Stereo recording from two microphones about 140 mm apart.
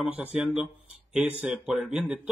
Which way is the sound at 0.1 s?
10° right (ahead or behind).